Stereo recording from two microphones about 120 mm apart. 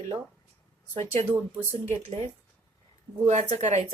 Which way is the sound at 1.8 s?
60° right (ahead or behind).